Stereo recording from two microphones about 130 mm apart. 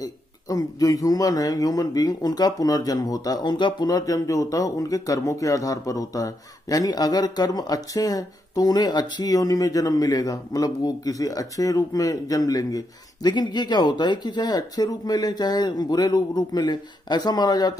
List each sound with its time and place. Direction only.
0.0 s a man's voice: 30° left (ahead or behind)